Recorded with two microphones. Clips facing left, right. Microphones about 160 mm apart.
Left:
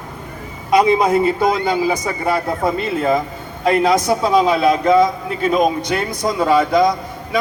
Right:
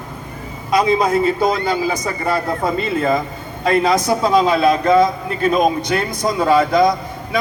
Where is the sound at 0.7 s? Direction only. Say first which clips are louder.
Left 2 dB; 15° left (ahead or behind).